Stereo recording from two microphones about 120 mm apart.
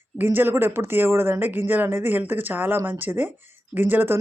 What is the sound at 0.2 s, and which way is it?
Speech, 15° right (ahead or behind).